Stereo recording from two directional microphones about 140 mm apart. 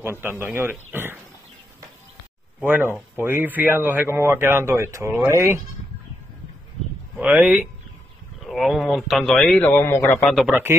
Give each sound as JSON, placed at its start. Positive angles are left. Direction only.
{"t": 0.0, "sound": "speech", "side_deg": -15}
{"t": 2.6, "sound": "speech", "side_deg": -15}
{"t": 7.2, "sound": "speech", "side_deg": -10}
{"t": 8.5, "sound": "a man's voice", "side_deg": 0}
{"t": 10.2, "sound": "a man's voice", "side_deg": 0}
{"t": 10.5, "sound": "speech", "side_deg": -15}